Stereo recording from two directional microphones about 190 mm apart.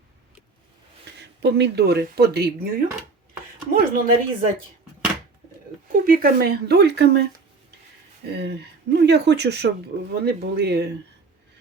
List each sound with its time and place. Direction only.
1.2 s speech: 65° right (ahead or behind)
3.7 s speech: 45° right (ahead or behind)
5.9 s speech: 50° right (ahead or behind)
8.3 s speech: 65° right (ahead or behind)